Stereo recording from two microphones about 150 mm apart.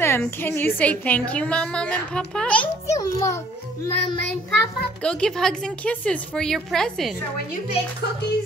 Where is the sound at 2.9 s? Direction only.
20° left (ahead or behind).